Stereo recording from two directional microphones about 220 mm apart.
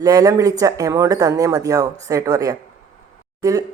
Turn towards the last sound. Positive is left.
turn(degrees=-15)  # may be behind; listen again after turning